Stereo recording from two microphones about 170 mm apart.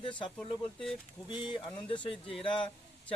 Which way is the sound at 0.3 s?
5° left (ahead or behind).